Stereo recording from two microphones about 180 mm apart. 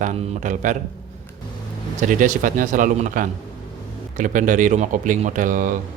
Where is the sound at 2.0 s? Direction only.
45° right (ahead or behind).